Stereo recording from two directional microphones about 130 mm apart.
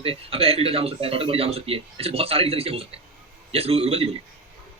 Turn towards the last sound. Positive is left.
turn(degrees=-50)  # may be behind; listen again after turning